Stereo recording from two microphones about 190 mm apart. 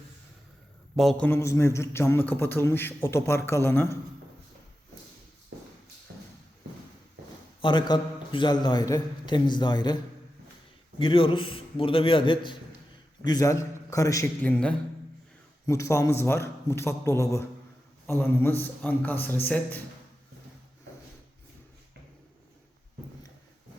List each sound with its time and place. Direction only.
0.9 s a man's voice: 5° left (ahead or behind)
6.1 s shuffle: 55° right (ahead or behind)
7.6 s a man's voice: 25° left (ahead or behind)
15.6 s a man's voice: 15° left (ahead or behind)